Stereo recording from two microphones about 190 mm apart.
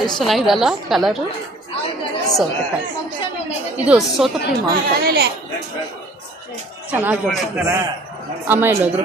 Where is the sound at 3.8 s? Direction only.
5° right (ahead or behind).